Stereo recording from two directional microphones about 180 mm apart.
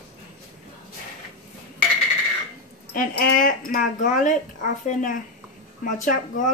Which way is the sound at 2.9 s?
50° left (ahead or behind).